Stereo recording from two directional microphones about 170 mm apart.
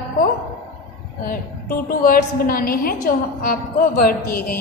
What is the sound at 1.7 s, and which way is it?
A woman's voice, 60° left (ahead or behind).